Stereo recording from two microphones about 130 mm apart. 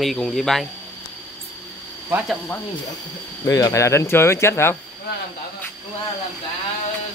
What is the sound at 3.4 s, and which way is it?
Speech, 25° left (ahead or behind).